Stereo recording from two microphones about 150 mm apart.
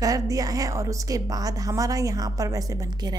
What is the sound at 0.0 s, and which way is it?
A woman's voice, 25° right (ahead or behind).